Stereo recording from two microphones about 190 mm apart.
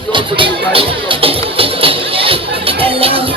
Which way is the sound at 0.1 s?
25° right (ahead or behind).